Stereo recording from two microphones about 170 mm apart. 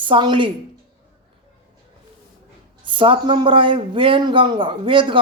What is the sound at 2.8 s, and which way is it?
Speech, 30° right (ahead or behind).